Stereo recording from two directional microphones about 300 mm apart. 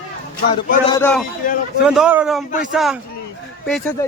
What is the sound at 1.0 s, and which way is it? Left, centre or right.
Speech, centre.